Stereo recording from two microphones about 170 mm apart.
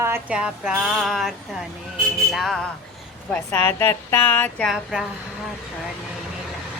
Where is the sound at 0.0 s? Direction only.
10° right (ahead or behind).